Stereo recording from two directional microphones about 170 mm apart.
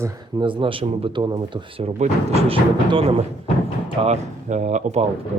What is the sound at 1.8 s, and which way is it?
A man's voice, 35° right (ahead or behind).